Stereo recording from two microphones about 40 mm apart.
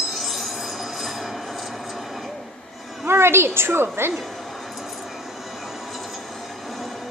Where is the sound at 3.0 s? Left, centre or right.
Right.